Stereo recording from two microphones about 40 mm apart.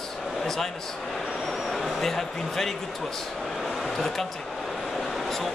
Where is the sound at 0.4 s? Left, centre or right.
Centre.